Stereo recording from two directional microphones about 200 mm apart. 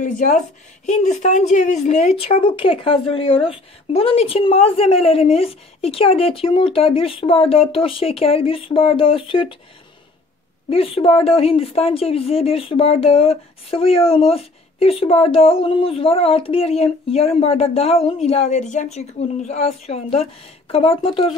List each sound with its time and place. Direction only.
0.0 s a woman's voice: 40° left (ahead or behind)
10.7 s speech: 30° left (ahead or behind)